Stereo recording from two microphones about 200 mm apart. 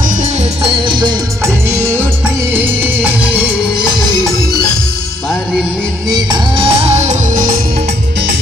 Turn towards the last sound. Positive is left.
turn(degrees=-40)  # may be behind; listen again after turning